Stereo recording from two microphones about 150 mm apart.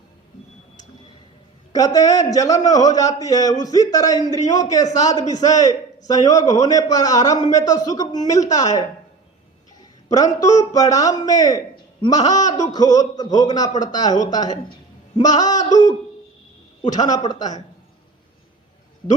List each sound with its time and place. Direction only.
1.7 s a man's voice: 25° left (ahead or behind)
10.1 s a man's voice: 25° left (ahead or behind)